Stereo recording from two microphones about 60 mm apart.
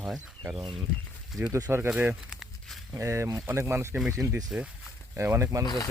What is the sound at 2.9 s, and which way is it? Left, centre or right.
Speech, right.